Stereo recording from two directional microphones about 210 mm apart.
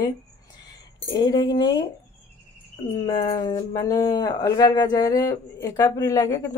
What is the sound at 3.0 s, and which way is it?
Speech, 20° left (ahead or behind).